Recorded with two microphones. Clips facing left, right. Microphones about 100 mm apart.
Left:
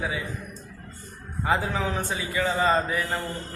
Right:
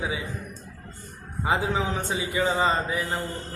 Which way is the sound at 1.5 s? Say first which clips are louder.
Even; 20° right (ahead or behind).